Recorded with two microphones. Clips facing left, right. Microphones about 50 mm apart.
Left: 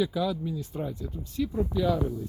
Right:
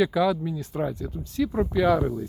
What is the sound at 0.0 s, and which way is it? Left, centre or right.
Speech, right.